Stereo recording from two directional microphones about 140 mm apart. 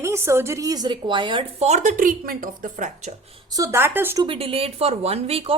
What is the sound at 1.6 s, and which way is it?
A woman's voice, 60° right (ahead or behind).